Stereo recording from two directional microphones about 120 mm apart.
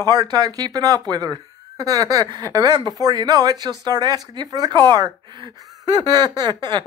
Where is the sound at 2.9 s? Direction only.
30° right (ahead or behind).